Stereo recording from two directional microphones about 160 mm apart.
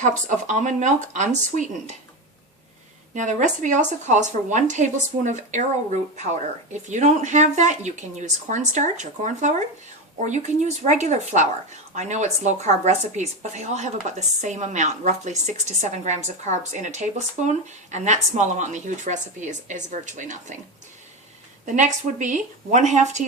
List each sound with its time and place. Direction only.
0.0 s a woman's voice: 50° right (ahead or behind)
3.2 s a woman's voice: 50° right (ahead or behind)
21.7 s a woman's voice: 50° right (ahead or behind)